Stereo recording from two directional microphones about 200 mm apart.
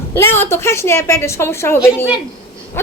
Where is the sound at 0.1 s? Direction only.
10° left (ahead or behind).